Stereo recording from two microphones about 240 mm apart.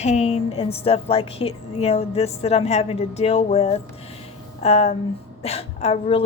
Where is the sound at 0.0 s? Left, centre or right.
Left.